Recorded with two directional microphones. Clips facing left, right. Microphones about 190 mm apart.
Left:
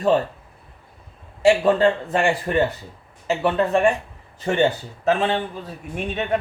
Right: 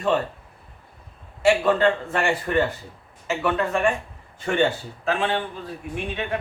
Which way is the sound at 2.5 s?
25° left (ahead or behind).